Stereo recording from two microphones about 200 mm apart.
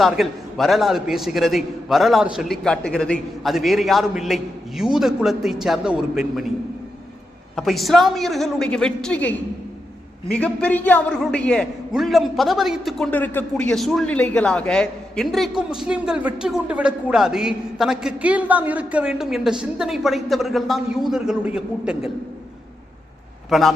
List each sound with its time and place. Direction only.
0.0 s a man's voice: centre (ahead or behind)
7.5 s a man's voice: centre (ahead or behind)
10.3 s a man's voice: 5° left (ahead or behind)
23.5 s a man's voice: centre (ahead or behind)